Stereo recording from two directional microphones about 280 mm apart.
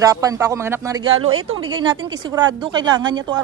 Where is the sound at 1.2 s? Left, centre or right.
Right.